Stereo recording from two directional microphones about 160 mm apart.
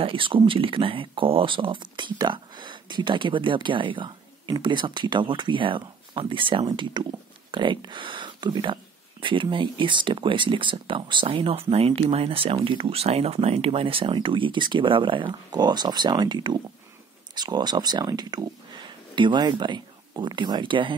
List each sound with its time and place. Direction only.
0.0 s speech: 35° right (ahead or behind)